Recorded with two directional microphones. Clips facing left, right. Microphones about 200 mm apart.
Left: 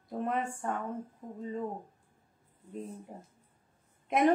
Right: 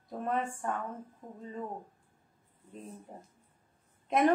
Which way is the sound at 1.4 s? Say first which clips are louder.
Left 4 dB; 20° left (ahead or behind).